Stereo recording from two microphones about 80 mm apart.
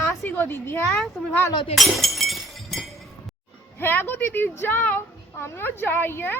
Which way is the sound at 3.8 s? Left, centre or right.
Left.